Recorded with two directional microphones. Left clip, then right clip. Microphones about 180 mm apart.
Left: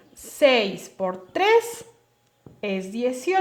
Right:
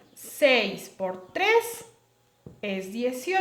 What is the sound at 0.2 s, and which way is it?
A woman's voice, 35° left (ahead or behind).